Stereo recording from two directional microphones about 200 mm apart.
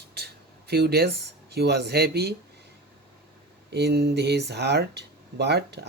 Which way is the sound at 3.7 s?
55° right (ahead or behind).